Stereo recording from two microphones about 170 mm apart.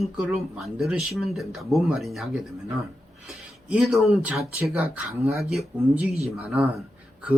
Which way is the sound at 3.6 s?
5° right (ahead or behind).